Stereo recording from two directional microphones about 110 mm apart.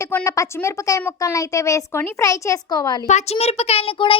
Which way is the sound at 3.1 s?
80° left.